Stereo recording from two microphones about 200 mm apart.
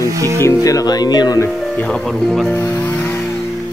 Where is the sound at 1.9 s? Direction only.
Centre (ahead or behind).